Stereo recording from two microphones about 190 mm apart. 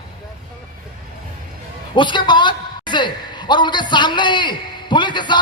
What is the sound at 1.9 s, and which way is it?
A man's voice, 25° left (ahead or behind).